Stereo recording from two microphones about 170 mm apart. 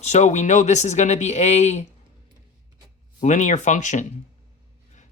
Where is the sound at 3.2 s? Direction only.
45° left (ahead or behind).